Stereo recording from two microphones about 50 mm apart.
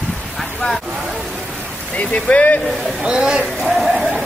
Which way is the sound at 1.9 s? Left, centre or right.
Left.